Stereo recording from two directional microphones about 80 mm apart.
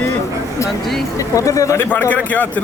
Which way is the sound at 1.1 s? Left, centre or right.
Left.